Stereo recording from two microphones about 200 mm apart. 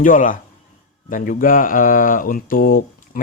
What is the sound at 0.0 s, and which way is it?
A man's voice, 40° left (ahead or behind).